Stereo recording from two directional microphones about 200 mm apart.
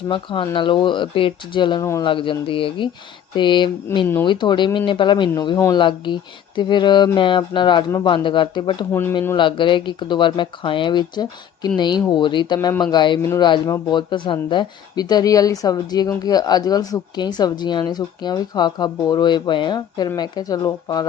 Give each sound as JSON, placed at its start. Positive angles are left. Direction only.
{"t": 0.1, "sound": "speech", "side_deg": 25}
{"t": 8.9, "sound": "speech", "side_deg": 10}
{"t": 9.3, "sound": "speech", "side_deg": 25}
{"t": 12.5, "sound": "speech", "side_deg": 10}
{"t": 12.8, "sound": "speech", "side_deg": 20}